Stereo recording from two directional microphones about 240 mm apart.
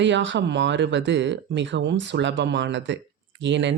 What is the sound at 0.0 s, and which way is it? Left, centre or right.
Speech, right.